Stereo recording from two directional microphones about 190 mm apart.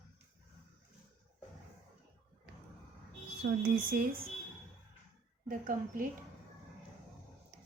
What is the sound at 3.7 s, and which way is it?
Speech, 50° right (ahead or behind).